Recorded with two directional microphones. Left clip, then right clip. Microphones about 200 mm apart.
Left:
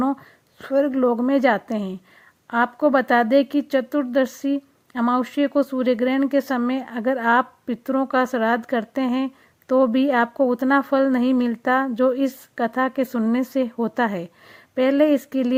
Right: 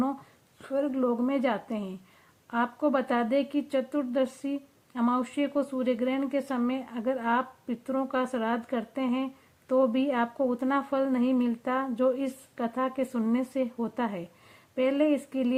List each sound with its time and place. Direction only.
0.6 s speech: 40° left (ahead or behind)